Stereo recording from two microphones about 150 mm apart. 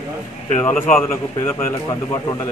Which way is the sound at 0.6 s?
15° left (ahead or behind).